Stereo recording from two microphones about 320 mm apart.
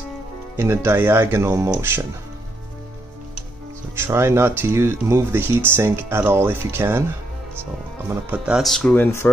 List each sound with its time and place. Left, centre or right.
0.6 s speech: centre
3.9 s speech: centre
8.1 s speech: centre